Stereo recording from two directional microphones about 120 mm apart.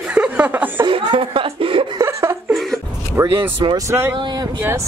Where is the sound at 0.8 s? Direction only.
45° right (ahead or behind).